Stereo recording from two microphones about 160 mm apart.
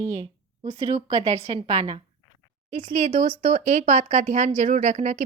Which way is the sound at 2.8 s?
30° right (ahead or behind).